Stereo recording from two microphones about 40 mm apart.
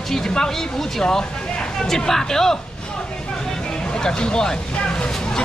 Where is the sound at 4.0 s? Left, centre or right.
Centre.